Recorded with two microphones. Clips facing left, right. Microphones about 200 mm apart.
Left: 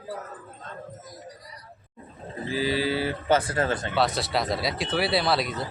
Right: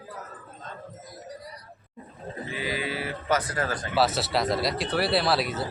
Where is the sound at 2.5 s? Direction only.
30° left (ahead or behind).